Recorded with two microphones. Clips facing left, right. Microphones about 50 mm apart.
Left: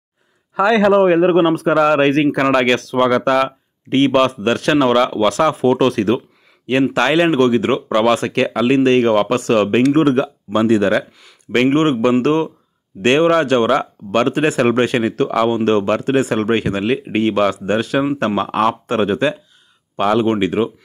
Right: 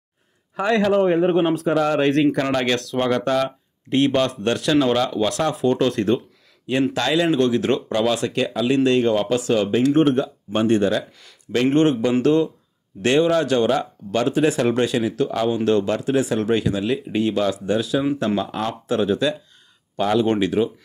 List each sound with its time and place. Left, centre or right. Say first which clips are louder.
0.9 s speech: left 5 dB; left
2.6 s speech: left 6 dB; left
3.1 s speech: left 3 dB; left
4.6 s speech: left 5 dB; left
5.7 s speech: left 4 dB; left
6.8 s speech: left 5 dB; left
11.1 s speech: left 2 dB; centre
11.5 s speech: left 3 dB; left
20.2 s speech: left 3 dB; left